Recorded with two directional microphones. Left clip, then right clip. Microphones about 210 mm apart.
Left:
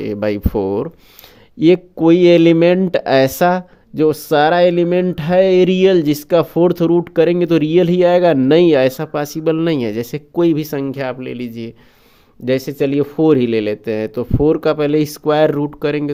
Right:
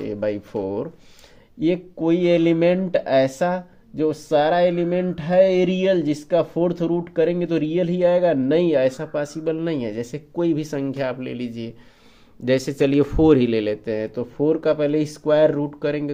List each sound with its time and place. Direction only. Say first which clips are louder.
0.0 s speech: left 6 dB; 45° left (ahead or behind)
12.5 s speech: left 2 dB; 20° left (ahead or behind); by 16.1 s 40° left (ahead or behind)